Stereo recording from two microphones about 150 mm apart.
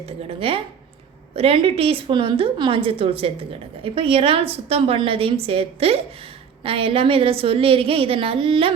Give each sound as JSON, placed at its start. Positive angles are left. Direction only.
{"t": 0.0, "sound": "a woman's voice", "side_deg": -40}